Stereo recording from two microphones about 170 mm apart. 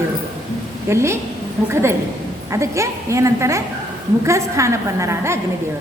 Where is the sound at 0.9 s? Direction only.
15° right (ahead or behind).